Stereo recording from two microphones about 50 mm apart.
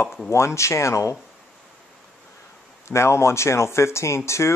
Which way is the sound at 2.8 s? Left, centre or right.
Left.